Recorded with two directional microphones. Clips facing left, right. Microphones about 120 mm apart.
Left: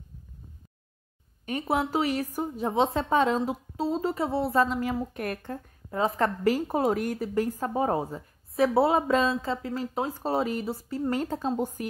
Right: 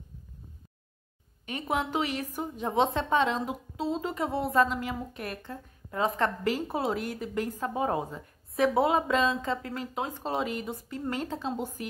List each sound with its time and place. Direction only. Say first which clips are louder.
1.4 s a woman's voice: left 3 dB; 40° left (ahead or behind)
5.9 s a woman's voice: left 2 dB; 35° left (ahead or behind)